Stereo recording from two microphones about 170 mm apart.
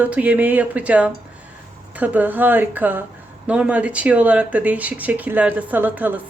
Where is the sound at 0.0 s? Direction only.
10° right (ahead or behind).